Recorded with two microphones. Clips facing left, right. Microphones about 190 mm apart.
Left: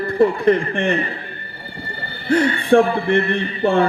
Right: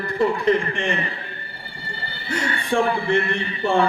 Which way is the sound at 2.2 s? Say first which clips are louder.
Left 10 dB; 60° left (ahead or behind).